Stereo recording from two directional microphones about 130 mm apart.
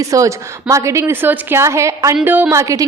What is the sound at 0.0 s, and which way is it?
A woman's voice, 25° right (ahead or behind).